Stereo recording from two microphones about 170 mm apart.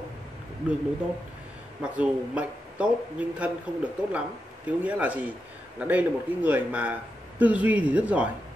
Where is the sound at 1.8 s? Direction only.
5° right (ahead or behind).